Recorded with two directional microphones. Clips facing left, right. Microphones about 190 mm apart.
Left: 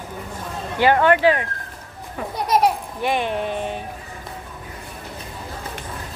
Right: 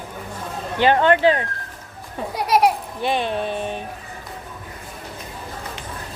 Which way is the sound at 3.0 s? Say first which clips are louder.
Even; 15° left (ahead or behind).